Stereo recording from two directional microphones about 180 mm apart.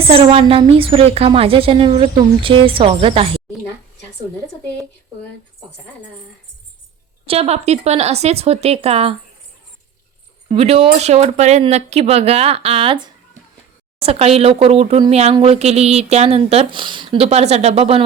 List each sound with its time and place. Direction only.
0.1 s speech: 30° right (ahead or behind)
7.3 s speech: 35° right (ahead or behind)
10.5 s speech: 30° right (ahead or behind)